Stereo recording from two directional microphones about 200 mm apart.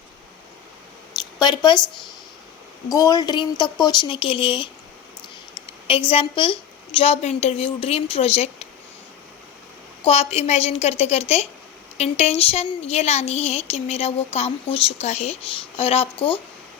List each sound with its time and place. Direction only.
1.4 s speech: 20° left (ahead or behind)
2.9 s a woman's voice: 20° left (ahead or behind)
5.9 s a woman's voice: 25° left (ahead or behind)
10.0 s a woman's voice: 30° left (ahead or behind)